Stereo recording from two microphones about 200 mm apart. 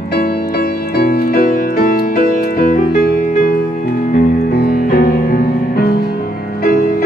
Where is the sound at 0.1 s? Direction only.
50° left (ahead or behind).